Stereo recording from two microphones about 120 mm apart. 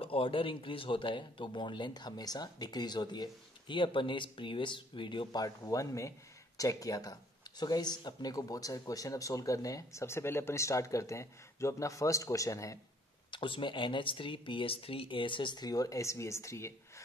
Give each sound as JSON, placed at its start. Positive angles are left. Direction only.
{"t": 0.0, "sound": "speech", "side_deg": 50}
{"t": 13.3, "sound": "speech", "side_deg": 45}